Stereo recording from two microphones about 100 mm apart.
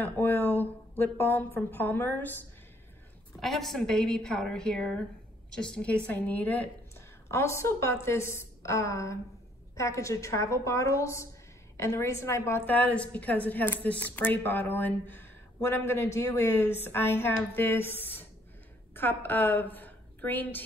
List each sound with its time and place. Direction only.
0.0 s speech: 20° left (ahead or behind)
3.3 s a woman's voice: 5° left (ahead or behind)
7.2 s a woman's voice: 25° left (ahead or behind)